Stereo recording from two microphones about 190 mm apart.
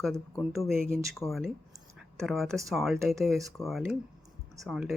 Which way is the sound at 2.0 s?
Centre (ahead or behind).